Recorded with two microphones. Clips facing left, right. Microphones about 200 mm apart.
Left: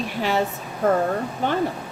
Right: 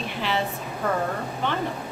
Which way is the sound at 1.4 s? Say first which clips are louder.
Left 4 dB; 40° left (ahead or behind).